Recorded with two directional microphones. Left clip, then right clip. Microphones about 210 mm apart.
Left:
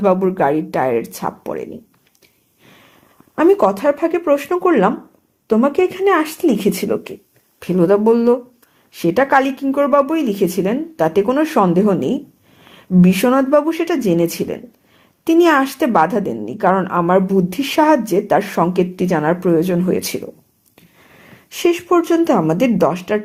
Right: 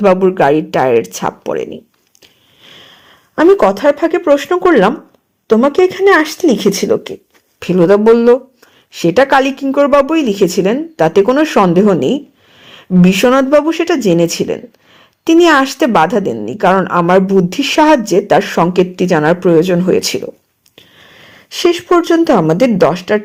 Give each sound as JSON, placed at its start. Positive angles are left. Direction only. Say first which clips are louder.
{"t": 0.0, "sound": "a woman's voice", "louder": "right 5 dB", "side_deg": -35}
{"t": 3.3, "sound": "a woman's voice", "louder": "right 4 dB", "side_deg": -30}
{"t": 21.5, "sound": "a woman's voice", "louder": "right 4 dB", "side_deg": -30}